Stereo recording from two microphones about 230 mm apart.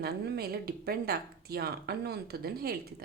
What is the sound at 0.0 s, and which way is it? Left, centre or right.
A woman's voice, right.